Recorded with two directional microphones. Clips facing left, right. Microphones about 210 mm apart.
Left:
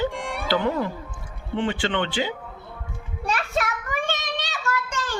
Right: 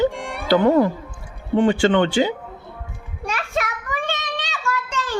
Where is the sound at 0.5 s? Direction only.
45° right (ahead or behind).